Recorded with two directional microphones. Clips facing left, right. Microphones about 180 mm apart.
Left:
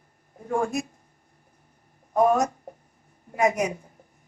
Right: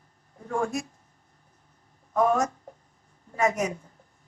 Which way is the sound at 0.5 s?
20° left (ahead or behind).